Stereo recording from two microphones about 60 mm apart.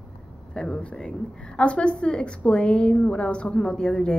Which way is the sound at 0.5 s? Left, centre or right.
Centre.